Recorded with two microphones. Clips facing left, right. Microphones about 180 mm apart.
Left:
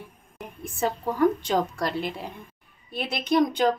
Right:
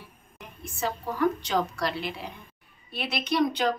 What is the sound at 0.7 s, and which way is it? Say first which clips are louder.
A woman's voice: left 4 dB; 50° left (ahead or behind).